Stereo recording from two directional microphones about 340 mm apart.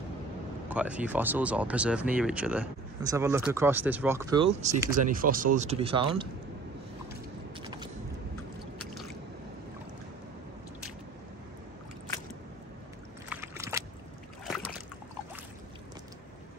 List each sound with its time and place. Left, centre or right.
0.7 s speech: centre
7.6 s vehicle: centre
13.3 s boat: centre